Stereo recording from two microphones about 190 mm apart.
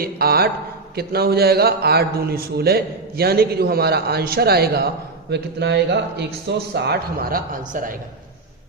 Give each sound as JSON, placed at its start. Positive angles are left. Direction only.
{"t": 0.0, "sound": "a man's voice", "side_deg": -55}